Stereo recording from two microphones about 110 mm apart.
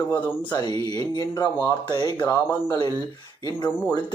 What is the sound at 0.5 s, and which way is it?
Speech, 40° left (ahead or behind).